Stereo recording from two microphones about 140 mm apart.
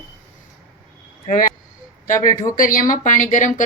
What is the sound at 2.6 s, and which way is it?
Speech, 75° left (ahead or behind).